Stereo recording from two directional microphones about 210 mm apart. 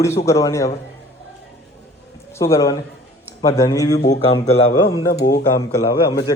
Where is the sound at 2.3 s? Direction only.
15° left (ahead or behind).